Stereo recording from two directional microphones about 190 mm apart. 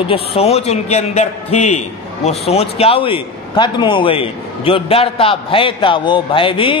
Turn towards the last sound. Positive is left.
turn(degrees=25)  # may be behind; listen again after turning